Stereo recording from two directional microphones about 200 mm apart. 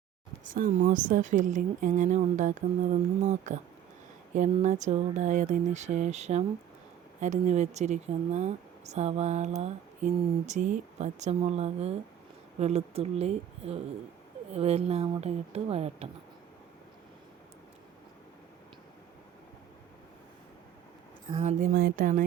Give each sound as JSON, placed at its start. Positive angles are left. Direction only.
{"t": 0.4, "sound": "speech", "side_deg": -40}
{"t": 21.4, "sound": "speech", "side_deg": -45}